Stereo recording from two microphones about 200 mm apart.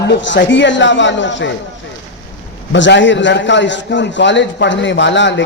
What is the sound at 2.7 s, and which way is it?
A man's voice, 65° left (ahead or behind).